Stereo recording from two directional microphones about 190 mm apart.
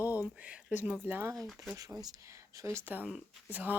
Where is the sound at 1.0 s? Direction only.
10° right (ahead or behind).